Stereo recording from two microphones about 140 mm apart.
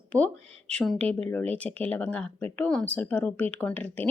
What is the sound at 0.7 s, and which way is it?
Speech, 5° left (ahead or behind).